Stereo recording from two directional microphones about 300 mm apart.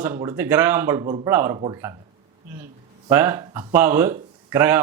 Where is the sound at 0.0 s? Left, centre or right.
Centre.